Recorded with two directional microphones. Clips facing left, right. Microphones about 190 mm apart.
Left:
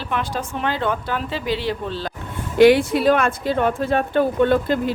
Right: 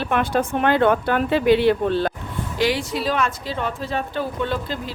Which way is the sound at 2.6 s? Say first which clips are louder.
Left 10 dB; 55° left (ahead or behind).